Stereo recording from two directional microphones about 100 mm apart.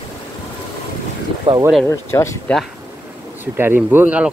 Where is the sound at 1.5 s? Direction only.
65° right (ahead or behind).